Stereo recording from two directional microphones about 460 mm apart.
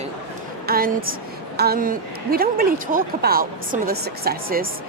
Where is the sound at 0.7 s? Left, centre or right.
Centre.